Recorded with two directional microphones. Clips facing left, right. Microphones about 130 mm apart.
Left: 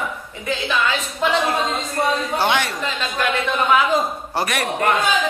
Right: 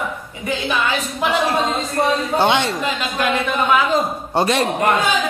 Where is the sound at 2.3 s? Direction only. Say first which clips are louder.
Right 5 dB; 25° right (ahead or behind).